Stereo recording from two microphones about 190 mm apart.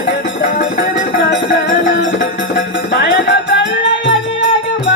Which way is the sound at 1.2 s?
70° left (ahead or behind).